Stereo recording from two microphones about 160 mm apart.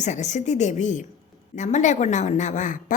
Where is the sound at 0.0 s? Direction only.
50° left (ahead or behind).